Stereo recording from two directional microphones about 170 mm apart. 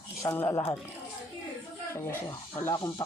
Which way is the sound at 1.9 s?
15° left (ahead or behind).